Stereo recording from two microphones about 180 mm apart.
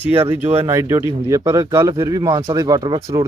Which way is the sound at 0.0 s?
10° right (ahead or behind).